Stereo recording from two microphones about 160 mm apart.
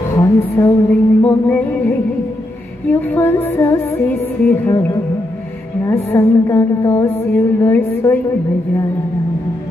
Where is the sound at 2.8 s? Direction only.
10° left (ahead or behind).